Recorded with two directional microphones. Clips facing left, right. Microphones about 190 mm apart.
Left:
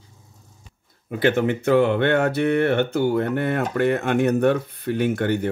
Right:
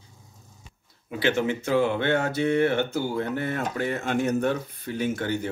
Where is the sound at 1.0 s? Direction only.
50° left (ahead or behind).